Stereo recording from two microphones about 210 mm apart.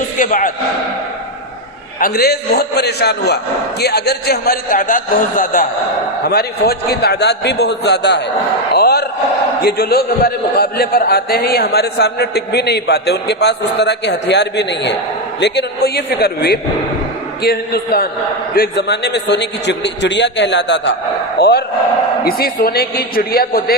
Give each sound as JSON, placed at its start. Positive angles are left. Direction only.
{"t": 0.2, "sound": "speech", "side_deg": 40}
{"t": 2.0, "sound": "a man's voice", "side_deg": 45}